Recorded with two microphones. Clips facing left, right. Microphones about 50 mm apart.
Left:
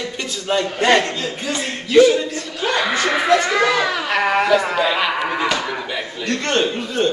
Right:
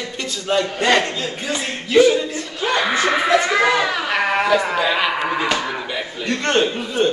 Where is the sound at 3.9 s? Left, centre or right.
Centre.